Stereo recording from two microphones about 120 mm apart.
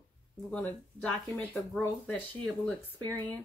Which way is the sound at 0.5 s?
10° left (ahead or behind).